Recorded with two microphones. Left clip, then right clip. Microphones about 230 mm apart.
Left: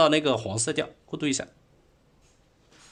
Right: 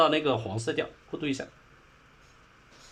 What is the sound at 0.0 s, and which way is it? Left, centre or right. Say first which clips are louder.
Speech: left 3 dB; left.